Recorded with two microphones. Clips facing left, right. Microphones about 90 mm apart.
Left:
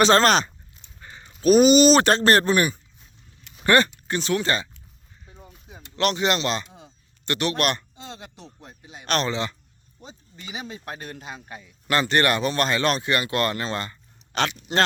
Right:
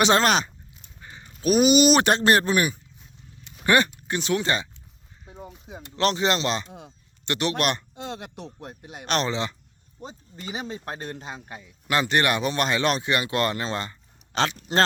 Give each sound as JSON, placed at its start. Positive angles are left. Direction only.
{"t": 0.0, "sound": "a sound", "side_deg": -10}
{"t": 0.9, "sound": "speech", "side_deg": -5}
{"t": 6.0, "sound": "speech", "side_deg": -30}
{"t": 7.9, "sound": "speech", "side_deg": -60}
{"t": 9.0, "sound": "speech", "side_deg": -20}
{"t": 10.0, "sound": "speech", "side_deg": -40}